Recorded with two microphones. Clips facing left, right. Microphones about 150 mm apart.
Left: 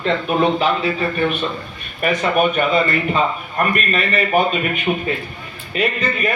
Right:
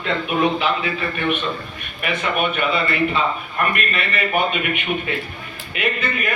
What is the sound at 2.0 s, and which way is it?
Speech, 40° left (ahead or behind).